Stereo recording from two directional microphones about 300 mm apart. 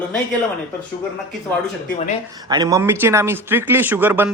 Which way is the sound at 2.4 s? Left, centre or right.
Centre.